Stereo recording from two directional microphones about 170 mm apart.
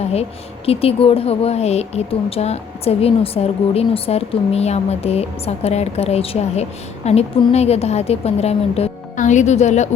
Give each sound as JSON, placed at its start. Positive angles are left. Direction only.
{"t": 0.1, "sound": "speech", "side_deg": 35}